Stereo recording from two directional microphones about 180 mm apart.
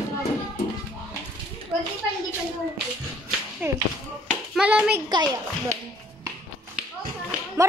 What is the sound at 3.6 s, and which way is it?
Speech, 10° right (ahead or behind).